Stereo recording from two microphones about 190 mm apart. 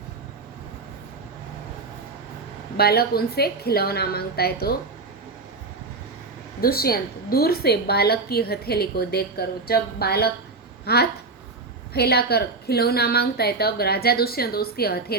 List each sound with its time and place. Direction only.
2.7 s a woman's voice: 55° left (ahead or behind)
6.6 s a woman's voice: 50° left (ahead or behind)